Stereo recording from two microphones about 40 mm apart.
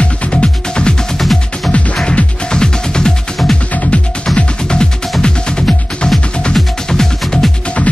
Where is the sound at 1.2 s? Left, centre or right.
Centre.